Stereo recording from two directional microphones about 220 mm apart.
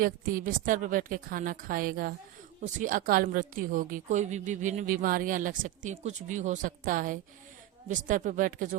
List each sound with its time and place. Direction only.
0.0 s speech: 40° right (ahead or behind)